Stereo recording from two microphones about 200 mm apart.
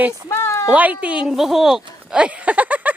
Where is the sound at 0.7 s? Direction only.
5° right (ahead or behind).